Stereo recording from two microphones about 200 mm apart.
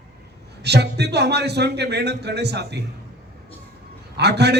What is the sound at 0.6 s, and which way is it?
A man's voice, 55° right (ahead or behind).